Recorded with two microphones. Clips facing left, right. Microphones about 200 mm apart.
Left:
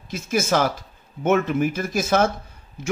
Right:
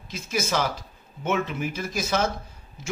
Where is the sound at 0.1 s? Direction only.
50° left (ahead or behind).